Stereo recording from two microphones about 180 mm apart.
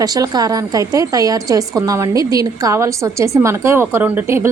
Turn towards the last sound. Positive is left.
turn(degrees=-15)  # may be behind; listen again after turning